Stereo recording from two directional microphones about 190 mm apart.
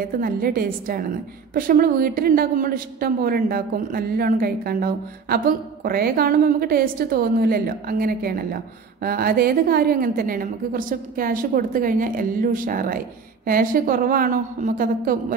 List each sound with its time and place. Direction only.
0.2 s a woman's voice: 50° right (ahead or behind)